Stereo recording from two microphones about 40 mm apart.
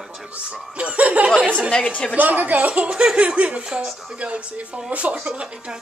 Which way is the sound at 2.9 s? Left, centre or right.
Right.